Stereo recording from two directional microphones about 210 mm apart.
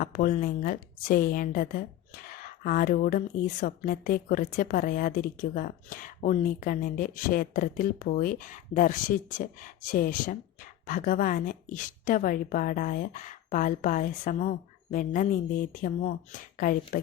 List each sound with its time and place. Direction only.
0.0 s a woman's voice: 40° left (ahead or behind)